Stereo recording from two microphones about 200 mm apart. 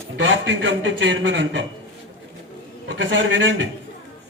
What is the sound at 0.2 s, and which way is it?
A man's voice, 70° right (ahead or behind).